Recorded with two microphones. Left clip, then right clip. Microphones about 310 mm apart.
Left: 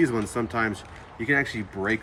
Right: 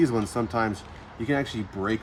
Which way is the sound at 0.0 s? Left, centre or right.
Centre.